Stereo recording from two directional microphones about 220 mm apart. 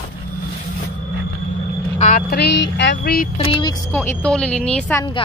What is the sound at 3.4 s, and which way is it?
Speech, 20° left (ahead or behind).